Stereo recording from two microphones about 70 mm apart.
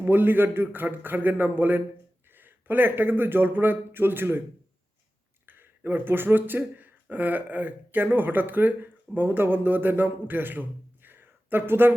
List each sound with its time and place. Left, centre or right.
0.0 s speech: right
5.5 s a man's voice: right